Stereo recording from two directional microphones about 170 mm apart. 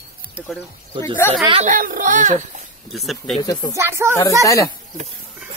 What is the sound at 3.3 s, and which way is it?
Speech, 25° left (ahead or behind).